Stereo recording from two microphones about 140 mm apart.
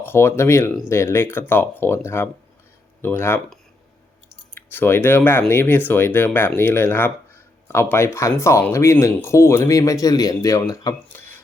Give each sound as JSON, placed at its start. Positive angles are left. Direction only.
{"t": 0.0, "sound": "speech", "side_deg": 15}
{"t": 4.5, "sound": "speech", "side_deg": 15}